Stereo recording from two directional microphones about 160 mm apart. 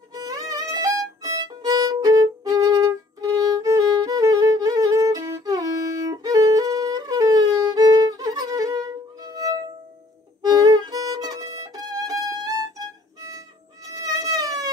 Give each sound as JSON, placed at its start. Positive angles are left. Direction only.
{"t": 0.1, "sound": "violin", "side_deg": -25}
{"t": 10.4, "sound": "music", "side_deg": -25}
{"t": 13.8, "sound": "mosquito", "side_deg": -20}